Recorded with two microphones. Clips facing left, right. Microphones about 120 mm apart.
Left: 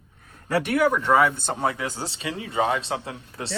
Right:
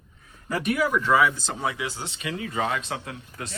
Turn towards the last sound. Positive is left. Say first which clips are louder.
# left 3 dB
turn(degrees=30)  # may be behind; listen again after turning